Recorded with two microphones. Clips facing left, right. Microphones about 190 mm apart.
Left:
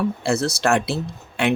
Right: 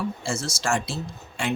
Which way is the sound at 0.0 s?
65° left (ahead or behind).